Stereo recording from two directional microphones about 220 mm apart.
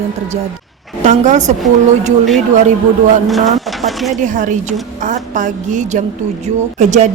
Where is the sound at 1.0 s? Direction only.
35° right (ahead or behind).